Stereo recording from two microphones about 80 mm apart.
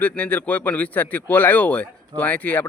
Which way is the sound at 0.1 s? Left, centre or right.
Centre.